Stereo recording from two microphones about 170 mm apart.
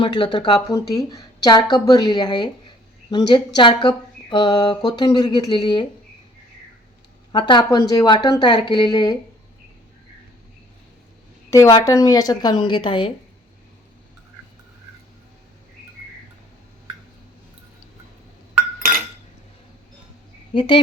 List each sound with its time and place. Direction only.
0.0 s speech: 25° left (ahead or behind)
7.3 s speech: 25° left (ahead or behind)
11.5 s speech: 20° left (ahead or behind)
20.5 s speech: 30° left (ahead or behind)